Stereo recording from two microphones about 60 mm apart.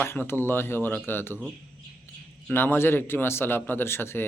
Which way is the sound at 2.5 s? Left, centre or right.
Left.